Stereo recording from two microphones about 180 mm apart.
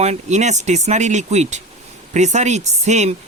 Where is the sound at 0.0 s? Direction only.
40° right (ahead or behind).